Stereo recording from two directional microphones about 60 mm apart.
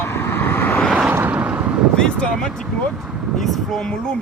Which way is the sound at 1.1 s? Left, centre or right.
Right.